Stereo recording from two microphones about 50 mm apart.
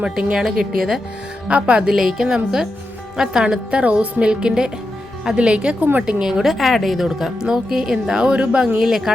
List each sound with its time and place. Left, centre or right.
0.0 s a woman's voice: centre
1.5 s a woman's voice: right
1.8 s a woman's voice: centre
5.8 s a woman's voice: right
6.1 s a woman's voice: centre